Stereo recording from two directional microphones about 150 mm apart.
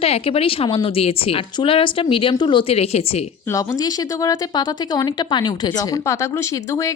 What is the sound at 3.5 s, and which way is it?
Speech, 25° left (ahead or behind).